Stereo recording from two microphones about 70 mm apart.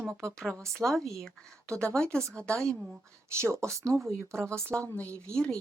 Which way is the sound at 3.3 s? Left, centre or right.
Right.